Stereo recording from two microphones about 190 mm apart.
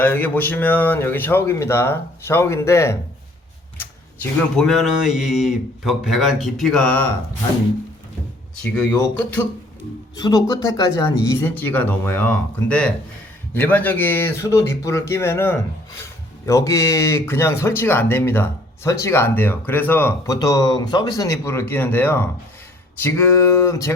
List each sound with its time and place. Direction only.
0.0 s speech: 10° left (ahead or behind)
8.6 s speech: 5° left (ahead or behind)
10.2 s speech: 20° left (ahead or behind)
23.6 s speech: 15° left (ahead or behind)